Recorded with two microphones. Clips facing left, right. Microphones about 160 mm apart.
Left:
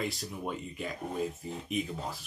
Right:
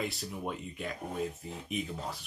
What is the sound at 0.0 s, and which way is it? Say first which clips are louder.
Speech: left 1 dB; centre (ahead or behind).